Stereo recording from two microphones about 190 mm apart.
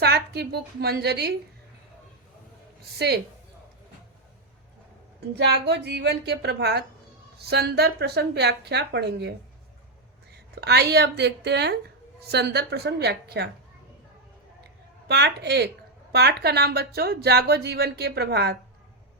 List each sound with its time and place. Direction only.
0.0 s a woman's voice: 60° right (ahead or behind)
3.0 s speech: 60° right (ahead or behind)
5.3 s speech: 60° right (ahead or behind)
10.5 s speech: 60° right (ahead or behind)
15.0 s speech: 60° right (ahead or behind)